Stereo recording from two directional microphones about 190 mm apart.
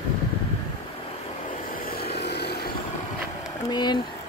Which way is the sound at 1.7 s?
50° left (ahead or behind).